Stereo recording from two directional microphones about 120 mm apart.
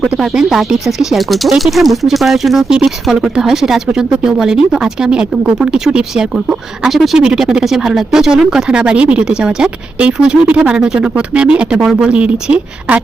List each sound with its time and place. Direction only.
0.2 s speech: 5° right (ahead or behind)